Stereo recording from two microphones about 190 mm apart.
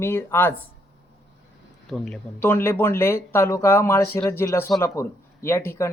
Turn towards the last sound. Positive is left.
turn(degrees=15)  # may be behind; listen again after turning